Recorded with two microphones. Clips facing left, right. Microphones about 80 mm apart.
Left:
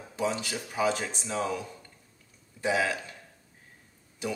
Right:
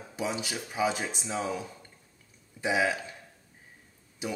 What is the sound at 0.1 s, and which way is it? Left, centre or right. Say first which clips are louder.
Speech: left 2 dB; centre.